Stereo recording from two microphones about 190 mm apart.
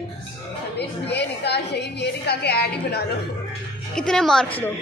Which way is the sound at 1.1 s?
60° left (ahead or behind).